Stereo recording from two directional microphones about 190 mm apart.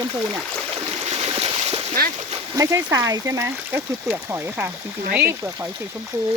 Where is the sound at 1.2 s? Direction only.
30° right (ahead or behind).